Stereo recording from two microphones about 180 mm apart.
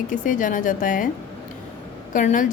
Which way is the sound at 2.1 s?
45° left (ahead or behind).